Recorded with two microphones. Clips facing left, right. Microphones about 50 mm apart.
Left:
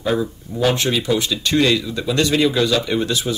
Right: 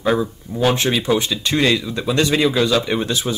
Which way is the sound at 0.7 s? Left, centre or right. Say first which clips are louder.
Right 1 dB; right.